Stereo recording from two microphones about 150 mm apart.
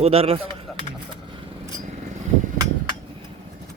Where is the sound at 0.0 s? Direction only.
40° right (ahead or behind).